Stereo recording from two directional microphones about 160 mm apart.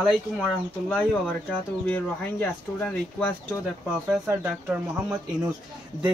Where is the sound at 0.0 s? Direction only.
5° left (ahead or behind).